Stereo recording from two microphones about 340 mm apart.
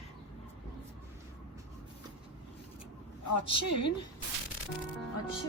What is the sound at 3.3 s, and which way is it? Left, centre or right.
Speech, left.